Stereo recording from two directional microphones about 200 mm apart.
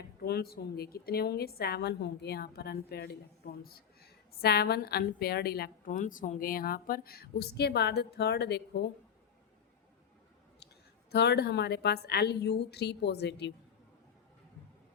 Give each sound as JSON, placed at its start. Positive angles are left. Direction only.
{"t": 0.3, "sound": "a woman's voice", "side_deg": 50}
{"t": 11.1, "sound": "a woman's voice", "side_deg": 55}